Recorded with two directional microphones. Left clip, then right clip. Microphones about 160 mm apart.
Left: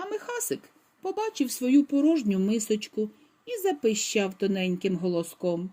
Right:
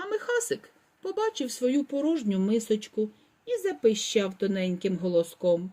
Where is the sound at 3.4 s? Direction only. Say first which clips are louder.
Left 1 dB; 45° left (ahead or behind).